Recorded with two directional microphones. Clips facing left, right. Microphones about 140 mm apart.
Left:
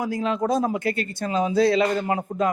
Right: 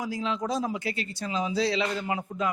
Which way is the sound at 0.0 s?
55° left (ahead or behind).